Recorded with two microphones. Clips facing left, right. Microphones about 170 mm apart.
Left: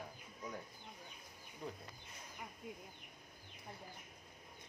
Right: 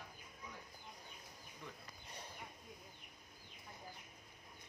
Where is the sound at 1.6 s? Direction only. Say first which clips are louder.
Left 7 dB; 35° left (ahead or behind).